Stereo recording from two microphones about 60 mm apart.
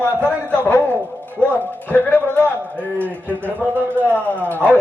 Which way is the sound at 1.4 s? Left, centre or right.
Left.